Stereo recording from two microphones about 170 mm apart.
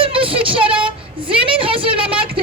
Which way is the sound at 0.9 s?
30° right (ahead or behind).